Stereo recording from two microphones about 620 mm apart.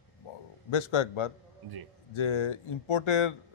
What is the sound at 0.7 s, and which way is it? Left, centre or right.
Speech, left.